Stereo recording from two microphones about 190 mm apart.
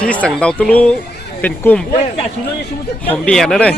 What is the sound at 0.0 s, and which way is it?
Speech, 5° left (ahead or behind).